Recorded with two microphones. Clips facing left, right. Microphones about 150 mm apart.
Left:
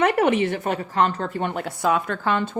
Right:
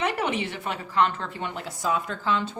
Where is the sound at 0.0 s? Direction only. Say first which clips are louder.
Left 8 dB; 55° left (ahead or behind).